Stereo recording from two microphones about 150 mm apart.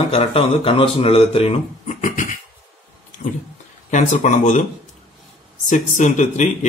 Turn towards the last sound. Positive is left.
turn(degrees=55)  # may be behind; listen again after turning